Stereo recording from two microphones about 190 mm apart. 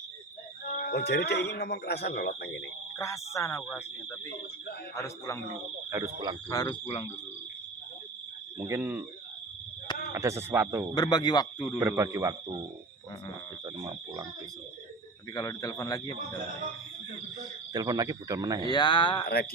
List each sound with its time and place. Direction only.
0.7 s speech: 55° left (ahead or behind)
3.0 s speech: 15° left (ahead or behind)
5.9 s speech: 20° right (ahead or behind)
6.5 s speech: 20° left (ahead or behind)
8.5 s speech: 15° right (ahead or behind)
10.2 s speech: 15° right (ahead or behind)
10.9 s speech: 20° left (ahead or behind)
11.8 s speech: 15° right (ahead or behind)
13.7 s speech: 20° right (ahead or behind)
15.4 s speech: 15° left (ahead or behind)
17.7 s speech: 20° right (ahead or behind)
18.6 s speech: 20° left (ahead or behind)